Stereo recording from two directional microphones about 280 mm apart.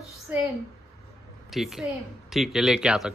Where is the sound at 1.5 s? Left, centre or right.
Centre.